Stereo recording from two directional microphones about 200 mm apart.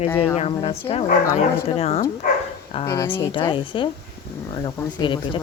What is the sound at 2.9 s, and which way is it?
Speech, 10° left (ahead or behind).